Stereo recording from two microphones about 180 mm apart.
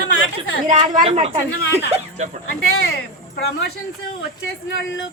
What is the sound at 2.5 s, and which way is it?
Speech, 60° left (ahead or behind).